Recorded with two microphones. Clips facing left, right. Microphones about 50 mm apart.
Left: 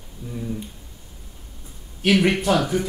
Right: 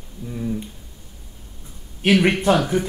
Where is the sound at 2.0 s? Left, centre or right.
Centre.